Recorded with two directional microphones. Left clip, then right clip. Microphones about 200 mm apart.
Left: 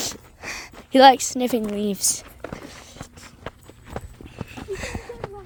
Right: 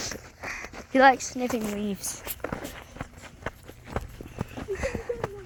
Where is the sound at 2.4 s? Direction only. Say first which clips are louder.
Right 2 dB; 40° right (ahead or behind).